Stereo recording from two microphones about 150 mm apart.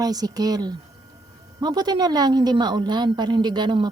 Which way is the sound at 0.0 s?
25° right (ahead or behind).